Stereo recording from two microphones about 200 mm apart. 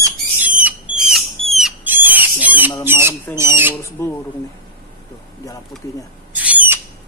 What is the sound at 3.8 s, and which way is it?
Squawk, 15° left (ahead or behind).